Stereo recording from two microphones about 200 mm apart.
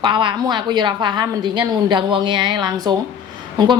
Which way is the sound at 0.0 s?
25° right (ahead or behind).